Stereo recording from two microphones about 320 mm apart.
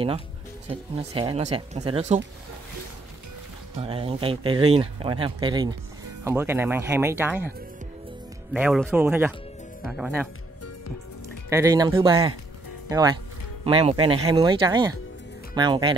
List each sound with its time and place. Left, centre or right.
0.7 s speech: centre
3.8 s speech: centre
8.5 s speech: centre
11.4 s speech: centre